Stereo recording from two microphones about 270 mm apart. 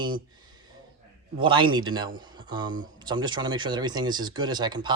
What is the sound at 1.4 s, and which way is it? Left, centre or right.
Speech, centre.